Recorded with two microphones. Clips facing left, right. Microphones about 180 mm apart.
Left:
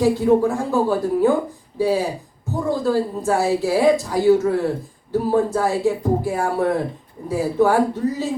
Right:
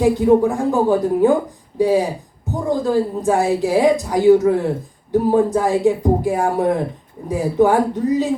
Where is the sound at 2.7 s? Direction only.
15° right (ahead or behind).